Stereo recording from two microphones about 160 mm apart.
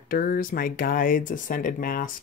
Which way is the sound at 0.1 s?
65° left (ahead or behind).